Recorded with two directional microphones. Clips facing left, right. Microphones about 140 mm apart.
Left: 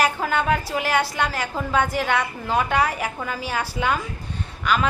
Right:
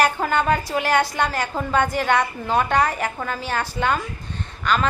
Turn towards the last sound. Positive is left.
turn(degrees=10)  # may be behind; listen again after turning